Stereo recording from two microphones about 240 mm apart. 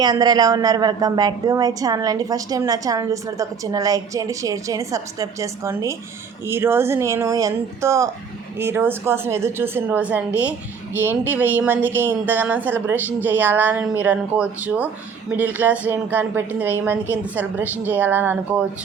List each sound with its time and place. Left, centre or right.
0.0 s a woman's voice: centre